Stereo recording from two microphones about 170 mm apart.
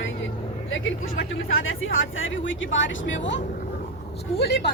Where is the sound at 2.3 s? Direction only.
90° left.